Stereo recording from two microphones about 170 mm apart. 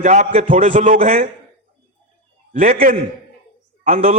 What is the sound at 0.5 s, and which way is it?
Speech, 45° right (ahead or behind).